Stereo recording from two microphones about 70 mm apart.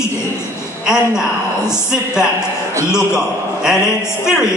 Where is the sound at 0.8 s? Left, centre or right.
Centre.